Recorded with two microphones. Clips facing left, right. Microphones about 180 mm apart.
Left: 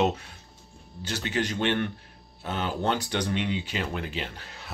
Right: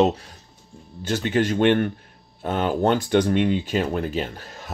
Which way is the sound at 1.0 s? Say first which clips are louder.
Right 8 dB; 50° right (ahead or behind).